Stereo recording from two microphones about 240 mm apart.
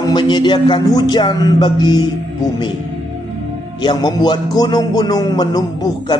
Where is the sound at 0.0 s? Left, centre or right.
Centre.